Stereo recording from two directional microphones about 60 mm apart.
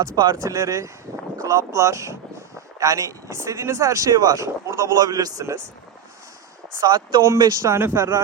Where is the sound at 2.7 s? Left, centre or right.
Right.